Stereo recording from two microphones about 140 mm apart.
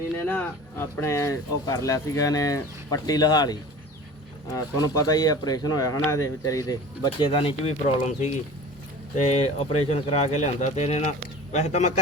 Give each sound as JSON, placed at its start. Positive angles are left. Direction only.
{"t": 0.2, "sound": "a man's voice", "side_deg": 15}